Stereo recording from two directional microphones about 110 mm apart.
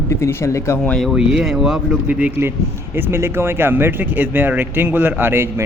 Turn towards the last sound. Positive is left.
turn(degrees=-20)  # may be behind; listen again after turning